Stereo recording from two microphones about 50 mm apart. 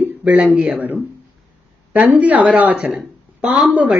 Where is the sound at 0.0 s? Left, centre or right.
Right.